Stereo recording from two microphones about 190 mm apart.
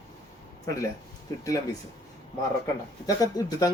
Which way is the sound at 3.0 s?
20° left (ahead or behind).